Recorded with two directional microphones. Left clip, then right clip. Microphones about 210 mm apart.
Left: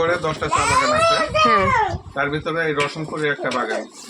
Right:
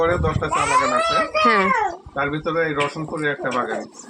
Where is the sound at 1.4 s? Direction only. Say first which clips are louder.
Left 1 dB; 10° right (ahead or behind).